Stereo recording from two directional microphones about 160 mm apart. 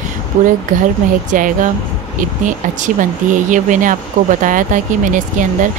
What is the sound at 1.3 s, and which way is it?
Speech, 55° right (ahead or behind).